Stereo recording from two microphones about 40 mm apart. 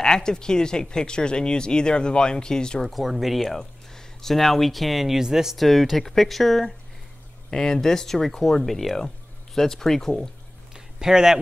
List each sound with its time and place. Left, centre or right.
0.0 s speech: centre
2.8 s speech: centre
3.5 s speech: centre
5.6 s speech: centre
7.5 s speech: centre
10.7 s a sound: centre